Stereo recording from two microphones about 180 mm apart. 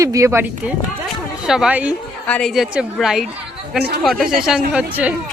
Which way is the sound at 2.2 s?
5° left (ahead or behind).